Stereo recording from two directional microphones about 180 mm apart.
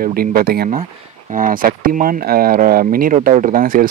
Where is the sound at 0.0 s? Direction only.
55° right (ahead or behind).